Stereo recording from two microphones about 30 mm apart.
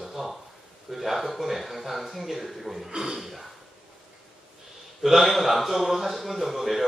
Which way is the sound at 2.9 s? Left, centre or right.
Centre.